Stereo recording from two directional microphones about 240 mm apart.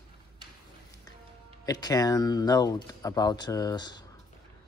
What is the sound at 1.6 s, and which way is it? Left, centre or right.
Speech, centre.